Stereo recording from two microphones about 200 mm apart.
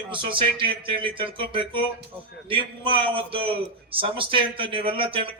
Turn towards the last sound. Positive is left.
turn(degrees=-25)  # may be behind; listen again after turning